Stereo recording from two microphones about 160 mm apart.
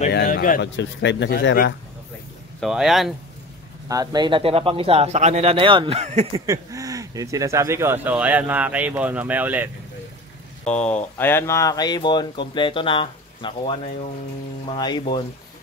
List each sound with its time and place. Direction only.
0.1 s a man's voice: 80° left
2.6 s speech: centre (ahead or behind)
3.9 s speech: 25° right (ahead or behind); by 6.2 s 45° right (ahead or behind)
6.3 s speech: 20° right (ahead or behind)
10.7 s speech: 10° left (ahead or behind); by 15.2 s 30° left (ahead or behind)